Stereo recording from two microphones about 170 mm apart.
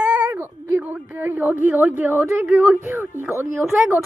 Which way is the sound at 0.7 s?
10° right (ahead or behind).